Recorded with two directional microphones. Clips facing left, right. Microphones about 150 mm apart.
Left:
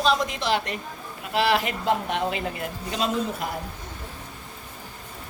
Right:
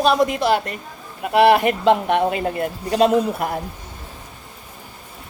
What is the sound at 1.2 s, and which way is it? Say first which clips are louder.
A woman's voice: right 9 dB; 60° right (ahead or behind).